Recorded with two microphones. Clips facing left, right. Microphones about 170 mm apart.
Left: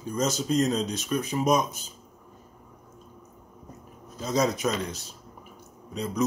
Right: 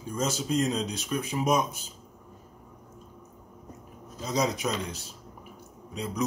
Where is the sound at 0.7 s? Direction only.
15° right (ahead or behind).